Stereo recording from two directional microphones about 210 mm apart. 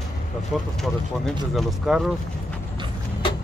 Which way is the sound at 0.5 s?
Centre (ahead or behind).